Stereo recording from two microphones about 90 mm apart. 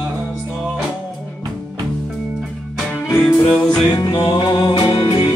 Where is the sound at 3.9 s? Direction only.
45° left (ahead or behind).